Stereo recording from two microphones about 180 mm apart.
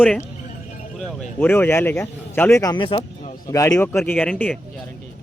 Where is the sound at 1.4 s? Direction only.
10° left (ahead or behind).